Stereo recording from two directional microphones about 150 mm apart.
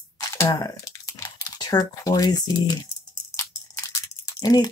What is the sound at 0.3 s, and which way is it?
Typing, 25° left (ahead or behind).